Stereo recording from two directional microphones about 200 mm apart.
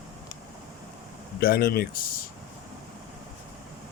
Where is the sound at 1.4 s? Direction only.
50° left (ahead or behind).